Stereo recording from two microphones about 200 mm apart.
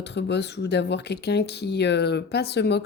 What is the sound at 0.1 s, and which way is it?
Speech, 60° left (ahead or behind).